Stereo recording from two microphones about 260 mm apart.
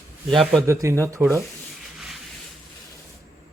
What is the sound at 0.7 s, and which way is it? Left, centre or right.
Speech, centre.